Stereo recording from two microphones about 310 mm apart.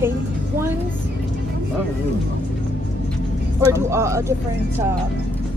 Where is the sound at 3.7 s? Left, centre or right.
Centre.